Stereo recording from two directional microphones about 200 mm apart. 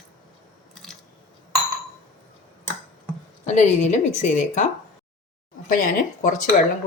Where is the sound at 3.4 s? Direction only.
35° left (ahead or behind).